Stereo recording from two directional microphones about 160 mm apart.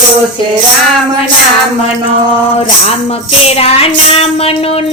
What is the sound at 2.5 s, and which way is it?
A woman's voice, 40° left (ahead or behind).